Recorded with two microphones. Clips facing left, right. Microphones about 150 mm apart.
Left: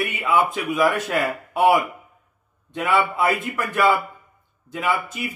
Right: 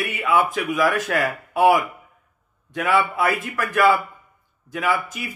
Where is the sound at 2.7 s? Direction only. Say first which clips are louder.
Even; 20° left (ahead or behind).